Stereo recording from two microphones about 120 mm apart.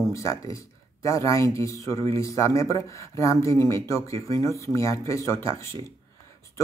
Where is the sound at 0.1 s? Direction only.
25° left (ahead or behind).